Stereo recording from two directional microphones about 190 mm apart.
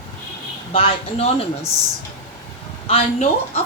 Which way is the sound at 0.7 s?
30° left (ahead or behind).